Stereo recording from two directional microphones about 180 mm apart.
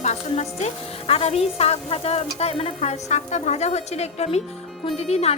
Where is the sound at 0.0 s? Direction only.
40° left (ahead or behind).